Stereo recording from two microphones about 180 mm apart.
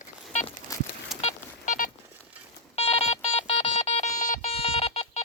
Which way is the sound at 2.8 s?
35° left (ahead or behind).